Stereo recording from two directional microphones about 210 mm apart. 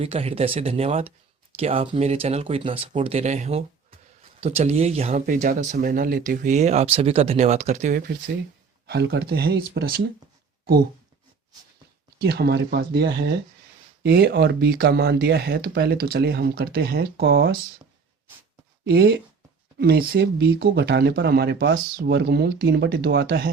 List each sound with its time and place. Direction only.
0.0 s speech: 30° right (ahead or behind)
8.9 s speech: 50° right (ahead or behind)
12.2 s speech: 50° right (ahead or behind)
18.9 s speech: 45° right (ahead or behind)